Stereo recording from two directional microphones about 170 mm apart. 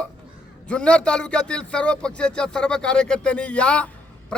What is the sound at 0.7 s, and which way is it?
A man's voice, 5° left (ahead or behind).